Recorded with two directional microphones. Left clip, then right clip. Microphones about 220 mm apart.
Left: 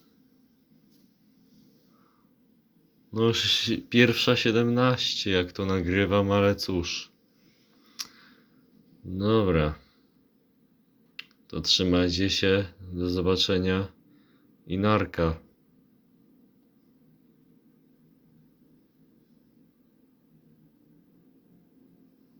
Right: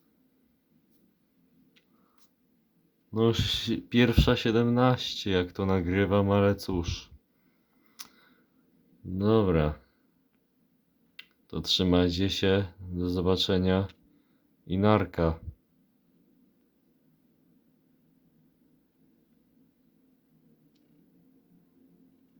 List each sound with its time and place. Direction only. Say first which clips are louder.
3.1 s speech: left 3 dB; 15° right (ahead or behind)
7.9 s a sound: left 9 dB; 15° right (ahead or behind)
9.1 s speech: left 1 dB; 15° right (ahead or behind)
11.2 s speech: left 4 dB; 20° right (ahead or behind)